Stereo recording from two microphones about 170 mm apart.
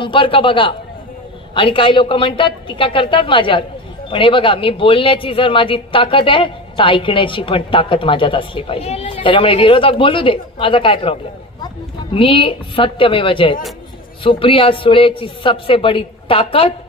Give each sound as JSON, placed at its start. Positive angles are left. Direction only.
{"t": 0.0, "sound": "a woman's voice", "side_deg": 30}